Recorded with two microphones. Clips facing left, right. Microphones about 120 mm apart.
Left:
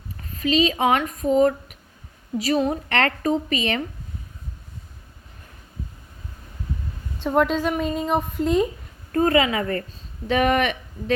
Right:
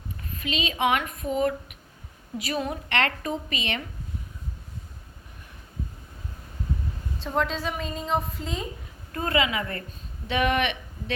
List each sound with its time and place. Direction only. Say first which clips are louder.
0.3 s a woman's voice: left 9 dB; 35° left (ahead or behind)
7.3 s a woman's voice: left 7 dB; 60° left (ahead or behind)
9.1 s a woman's voice: left 7 dB; 40° left (ahead or behind)